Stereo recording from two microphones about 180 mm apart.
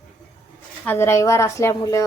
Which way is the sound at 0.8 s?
15° left (ahead or behind).